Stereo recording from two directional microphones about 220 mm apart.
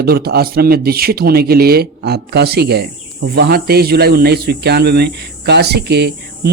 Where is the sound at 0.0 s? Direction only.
45° right (ahead or behind).